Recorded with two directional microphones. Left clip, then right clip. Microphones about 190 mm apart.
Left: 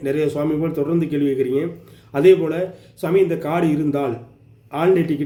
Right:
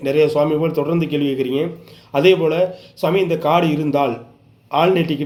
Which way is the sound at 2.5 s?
20° left (ahead or behind).